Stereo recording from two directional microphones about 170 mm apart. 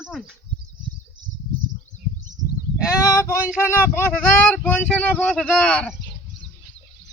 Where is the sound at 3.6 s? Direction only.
15° left (ahead or behind).